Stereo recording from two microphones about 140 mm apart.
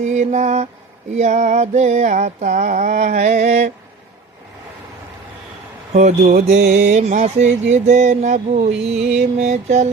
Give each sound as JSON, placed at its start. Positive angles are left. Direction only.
{"t": 0.0, "sound": "mantra", "side_deg": -60}
{"t": 5.9, "sound": "mantra", "side_deg": -55}